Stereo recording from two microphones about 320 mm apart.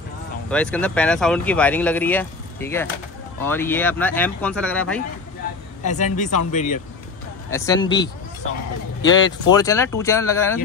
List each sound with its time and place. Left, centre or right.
0.5 s speech: centre
5.9 s speech: left
7.4 s speech: centre